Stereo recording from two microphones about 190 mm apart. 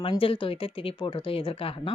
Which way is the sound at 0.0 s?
30° left (ahead or behind).